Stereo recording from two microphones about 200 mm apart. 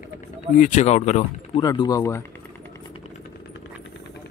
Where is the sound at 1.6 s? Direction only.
20° left (ahead or behind).